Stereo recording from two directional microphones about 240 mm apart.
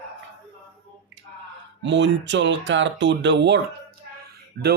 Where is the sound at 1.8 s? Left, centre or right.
Right.